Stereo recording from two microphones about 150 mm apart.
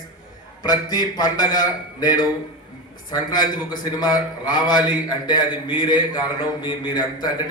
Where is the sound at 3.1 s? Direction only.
30° left (ahead or behind).